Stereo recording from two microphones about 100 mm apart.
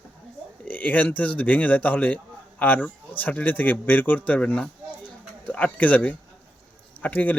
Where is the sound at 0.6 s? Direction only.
15° left (ahead or behind).